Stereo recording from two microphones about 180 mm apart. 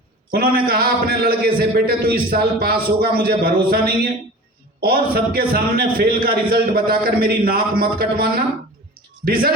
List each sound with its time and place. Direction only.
0.3 s a man's voice: 55° right (ahead or behind)